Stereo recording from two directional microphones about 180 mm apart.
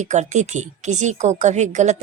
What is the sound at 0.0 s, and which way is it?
Speech, 40° right (ahead or behind).